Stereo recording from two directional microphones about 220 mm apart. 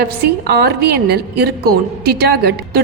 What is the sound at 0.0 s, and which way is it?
A woman's voice, 45° right (ahead or behind).